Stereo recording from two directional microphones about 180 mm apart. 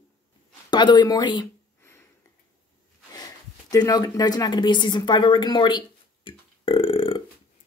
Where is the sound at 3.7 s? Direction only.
20° left (ahead or behind).